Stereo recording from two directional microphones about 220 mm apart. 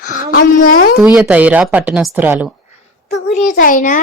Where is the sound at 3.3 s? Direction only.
35° left (ahead or behind).